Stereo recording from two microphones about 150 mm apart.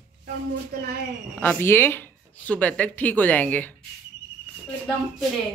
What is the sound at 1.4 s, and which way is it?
Speech, 15° left (ahead or behind).